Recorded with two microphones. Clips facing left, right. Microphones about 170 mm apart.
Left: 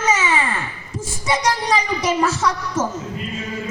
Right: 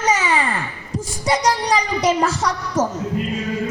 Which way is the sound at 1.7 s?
35° right (ahead or behind).